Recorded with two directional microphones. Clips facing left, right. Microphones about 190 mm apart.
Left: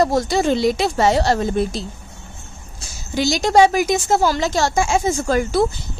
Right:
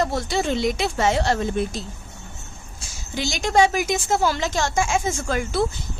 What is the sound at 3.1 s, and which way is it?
A woman's voice, 40° left (ahead or behind).